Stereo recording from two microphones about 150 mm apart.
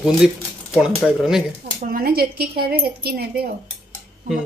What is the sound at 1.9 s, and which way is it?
A woman's voice, 85° right.